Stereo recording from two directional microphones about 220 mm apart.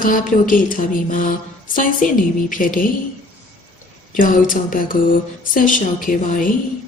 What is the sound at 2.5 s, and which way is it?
Speech, 40° left (ahead or behind).